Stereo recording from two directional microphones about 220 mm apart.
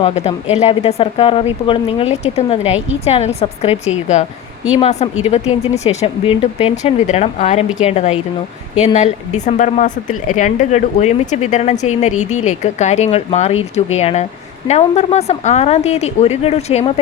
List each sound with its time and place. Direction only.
0.0 s speech: 30° left (ahead or behind)